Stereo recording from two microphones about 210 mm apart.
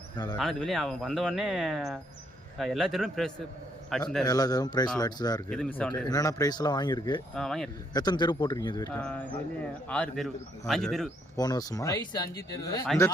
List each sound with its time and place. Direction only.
0.3 s speech: centre (ahead or behind)
4.3 s speech: 20° left (ahead or behind)
5.5 s speech: 5° left (ahead or behind)
6.1 s speech: 15° left (ahead or behind)
7.3 s speech: centre (ahead or behind)
7.9 s speech: 20° left (ahead or behind)
8.9 s speech: 5° left (ahead or behind)
11.3 s speech: 20° left (ahead or behind)